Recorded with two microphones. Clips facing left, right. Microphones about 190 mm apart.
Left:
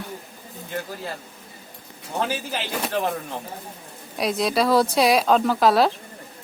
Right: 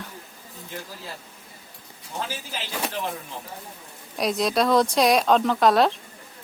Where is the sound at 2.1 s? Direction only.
60° left (ahead or behind).